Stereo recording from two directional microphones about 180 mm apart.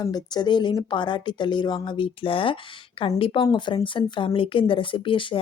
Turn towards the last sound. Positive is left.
turn(degrees=30)  # may be behind; listen again after turning